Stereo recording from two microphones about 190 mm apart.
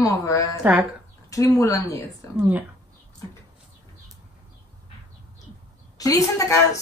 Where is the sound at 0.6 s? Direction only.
10° right (ahead or behind).